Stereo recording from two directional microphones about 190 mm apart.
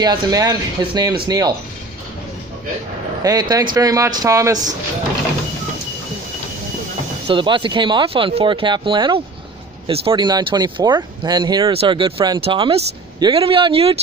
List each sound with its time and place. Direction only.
0.0 s speech: 20° right (ahead or behind)
3.2 s speech: 20° right (ahead or behind)
7.2 s speech: 25° right (ahead or behind)